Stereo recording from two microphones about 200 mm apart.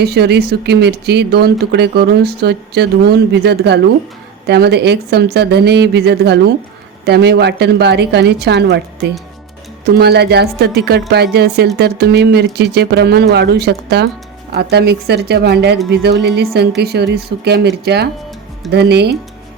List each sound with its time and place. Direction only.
0.0 s speech: 55° right (ahead or behind)
9.8 s speech: 55° right (ahead or behind)